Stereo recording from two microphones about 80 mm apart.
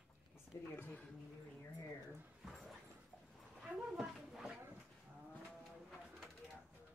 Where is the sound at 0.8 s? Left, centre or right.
Left.